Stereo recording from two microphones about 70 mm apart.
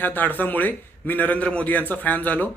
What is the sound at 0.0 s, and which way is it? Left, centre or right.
A man's voice, left.